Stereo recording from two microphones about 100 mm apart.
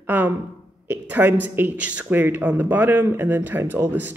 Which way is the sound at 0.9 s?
20° right (ahead or behind).